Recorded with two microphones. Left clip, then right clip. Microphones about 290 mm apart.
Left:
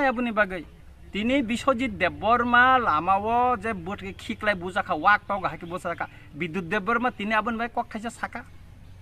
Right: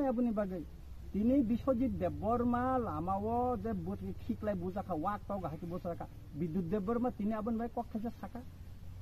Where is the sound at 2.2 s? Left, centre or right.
Centre.